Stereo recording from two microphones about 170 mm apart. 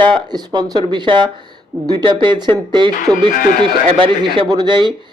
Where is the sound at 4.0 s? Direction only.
30° right (ahead or behind).